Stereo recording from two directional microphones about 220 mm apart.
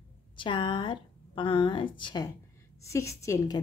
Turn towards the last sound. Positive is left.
turn(degrees=15)  # may be behind; listen again after turning